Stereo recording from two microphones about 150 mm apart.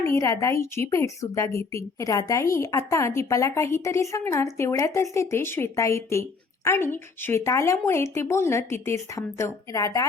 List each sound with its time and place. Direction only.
0.0 s a woman's voice: 20° left (ahead or behind)